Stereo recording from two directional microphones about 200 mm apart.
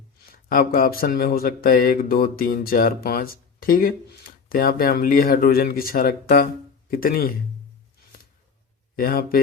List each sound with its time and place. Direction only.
0.3 s speech: 45° left (ahead or behind)
9.0 s speech: 45° left (ahead or behind)